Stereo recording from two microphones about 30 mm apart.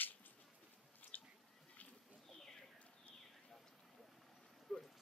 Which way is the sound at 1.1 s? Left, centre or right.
Left.